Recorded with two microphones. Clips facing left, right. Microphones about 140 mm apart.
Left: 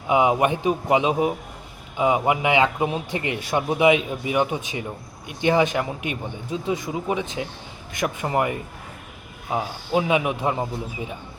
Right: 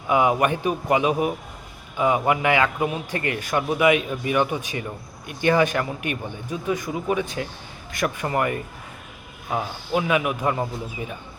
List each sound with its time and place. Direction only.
0.1 s a man's voice: 20° left (ahead or behind)